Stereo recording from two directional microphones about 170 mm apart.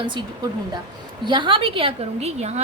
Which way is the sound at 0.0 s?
30° right (ahead or behind).